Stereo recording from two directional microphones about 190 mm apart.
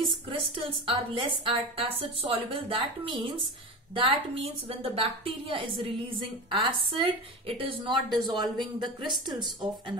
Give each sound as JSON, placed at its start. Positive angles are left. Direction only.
{"t": 0.0, "sound": "a woman's voice", "side_deg": -30}